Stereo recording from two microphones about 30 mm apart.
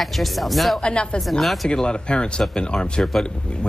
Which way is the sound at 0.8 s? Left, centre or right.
Left.